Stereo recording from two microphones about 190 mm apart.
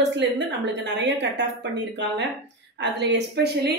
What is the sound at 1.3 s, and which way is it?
A woman's voice, 65° right (ahead or behind).